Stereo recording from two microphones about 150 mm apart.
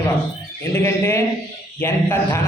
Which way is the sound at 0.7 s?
15° left (ahead or behind).